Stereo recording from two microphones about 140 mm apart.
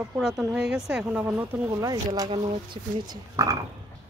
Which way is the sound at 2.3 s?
35° right (ahead or behind).